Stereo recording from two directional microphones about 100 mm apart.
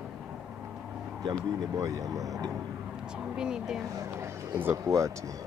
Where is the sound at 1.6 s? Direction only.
35° right (ahead or behind).